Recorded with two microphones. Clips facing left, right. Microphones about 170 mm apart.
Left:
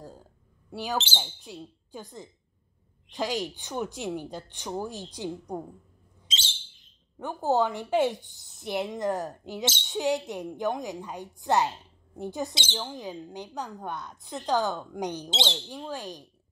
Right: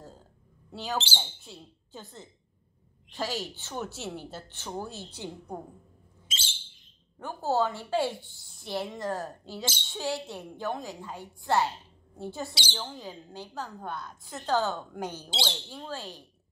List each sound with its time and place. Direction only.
0.7 s a woman's voice: 15° left (ahead or behind)
7.2 s a woman's voice: 15° left (ahead or behind)